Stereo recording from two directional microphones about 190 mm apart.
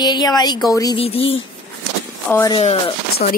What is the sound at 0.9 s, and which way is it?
Speech, 30° left (ahead or behind).